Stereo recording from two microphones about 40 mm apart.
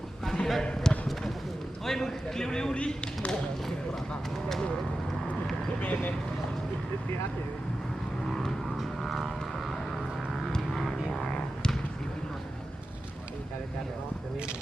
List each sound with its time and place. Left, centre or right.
0.3 s basketball bounce: centre
0.6 s basketball bounce: centre
1.8 s a man's voice: centre
2.7 s speech: left
5.8 s speech: left
8.3 s vehicle: centre
9.0 s vehicle: centre
10.5 s music: centre